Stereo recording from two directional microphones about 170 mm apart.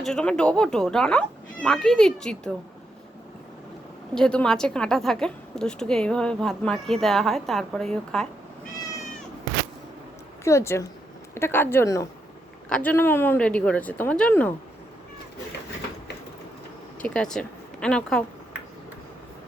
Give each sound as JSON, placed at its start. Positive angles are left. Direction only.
{"t": 0.0, "sound": "a woman's voice", "side_deg": 5}
{"t": 4.1, "sound": "a woman's voice", "side_deg": 5}
{"t": 10.4, "sound": "speech", "side_deg": 15}
{"t": 17.0, "sound": "speech", "side_deg": 5}